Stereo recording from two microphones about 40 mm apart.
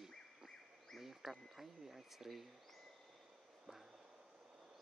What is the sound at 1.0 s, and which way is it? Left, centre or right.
Speech, centre.